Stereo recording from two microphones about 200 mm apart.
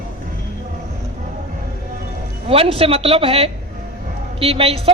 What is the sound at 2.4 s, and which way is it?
A man's voice, 30° right (ahead or behind).